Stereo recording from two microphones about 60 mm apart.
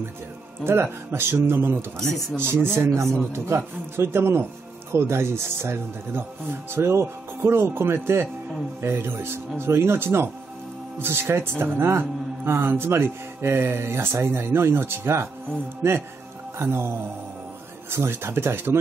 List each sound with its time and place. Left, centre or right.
0.7 s speech: right